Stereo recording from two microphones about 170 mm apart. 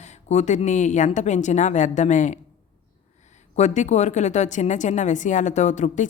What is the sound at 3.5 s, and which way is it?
Speech, 45° left (ahead or behind).